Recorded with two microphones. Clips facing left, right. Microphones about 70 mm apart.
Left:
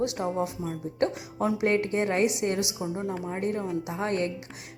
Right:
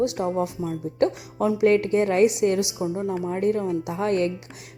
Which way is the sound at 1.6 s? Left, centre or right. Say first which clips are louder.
Right 7 dB; left.